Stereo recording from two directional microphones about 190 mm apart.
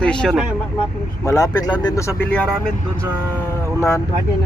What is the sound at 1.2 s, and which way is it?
Speech, 20° left (ahead or behind).